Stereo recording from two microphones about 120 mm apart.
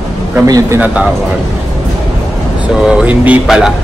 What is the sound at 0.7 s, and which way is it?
Speech, 10° right (ahead or behind).